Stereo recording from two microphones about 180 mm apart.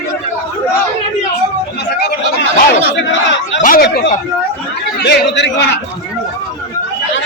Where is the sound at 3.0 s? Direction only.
90° left.